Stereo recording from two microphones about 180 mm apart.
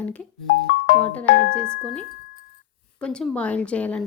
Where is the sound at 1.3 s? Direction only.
85° left.